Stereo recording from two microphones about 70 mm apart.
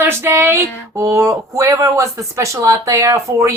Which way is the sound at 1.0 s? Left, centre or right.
Right.